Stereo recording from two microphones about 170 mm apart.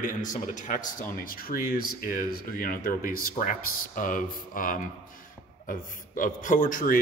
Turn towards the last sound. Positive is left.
turn(degrees=50)  # may be behind; listen again after turning